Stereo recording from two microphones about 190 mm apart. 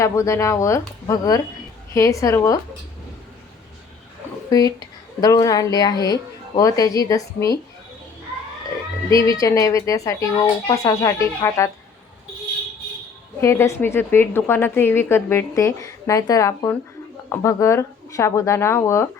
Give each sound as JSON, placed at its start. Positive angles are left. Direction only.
{"t": 0.0, "sound": "a woman's voice", "side_deg": 15}
{"t": 4.5, "sound": "a woman's voice", "side_deg": 20}
{"t": 9.0, "sound": "a woman's voice", "side_deg": 20}
{"t": 13.4, "sound": "a woman's voice", "side_deg": 15}